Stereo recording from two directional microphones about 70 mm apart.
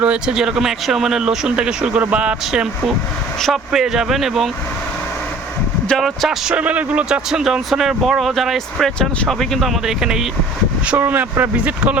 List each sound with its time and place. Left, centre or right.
0.0 s speech: centre
6.0 s speech: centre
6.5 s speech: centre
7.3 s speech: centre
10.9 s speech: right